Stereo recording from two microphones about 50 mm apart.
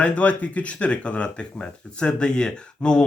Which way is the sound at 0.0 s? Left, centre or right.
Left.